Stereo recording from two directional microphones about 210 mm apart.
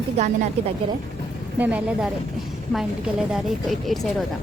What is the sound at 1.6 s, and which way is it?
Speech, 5° right (ahead or behind).